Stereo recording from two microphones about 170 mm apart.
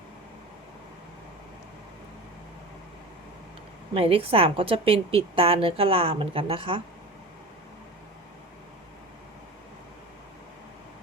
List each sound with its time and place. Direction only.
3.9 s a woman's voice: 35° right (ahead or behind)